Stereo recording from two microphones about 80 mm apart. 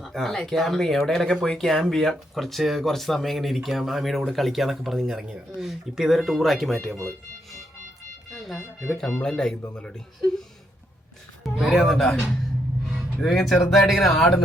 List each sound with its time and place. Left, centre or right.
0.0 s speech: centre
8.3 s a sound: centre
9.2 s speech: centre
11.4 s speech: centre